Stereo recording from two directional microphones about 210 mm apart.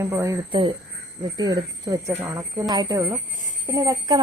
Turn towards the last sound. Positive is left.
turn(degrees=-15)  # may be behind; listen again after turning